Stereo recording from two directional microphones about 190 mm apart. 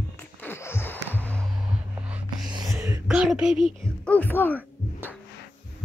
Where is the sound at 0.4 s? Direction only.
10° left (ahead or behind).